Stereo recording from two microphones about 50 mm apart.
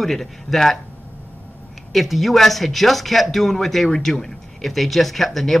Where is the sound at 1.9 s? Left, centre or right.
Centre.